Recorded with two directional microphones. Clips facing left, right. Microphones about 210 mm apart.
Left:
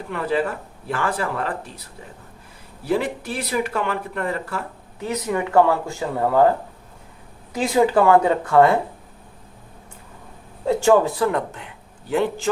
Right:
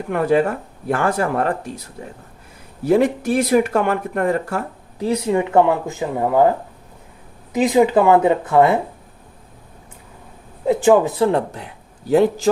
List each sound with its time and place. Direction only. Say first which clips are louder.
0.1 s speech: right 6 dB; 45° right (ahead or behind)
2.8 s speech: right 7 dB; 45° right (ahead or behind)
5.0 s speech: right 5 dB; 30° right (ahead or behind)
7.5 s speech: right 3 dB; 20° right (ahead or behind)
10.7 s a man's voice: right 2 dB; 15° right (ahead or behind); by 12.5 s 40° right (ahead or behind)